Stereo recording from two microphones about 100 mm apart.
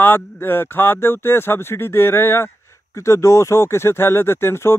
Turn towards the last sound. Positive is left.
turn(degrees=25)  # may be behind; listen again after turning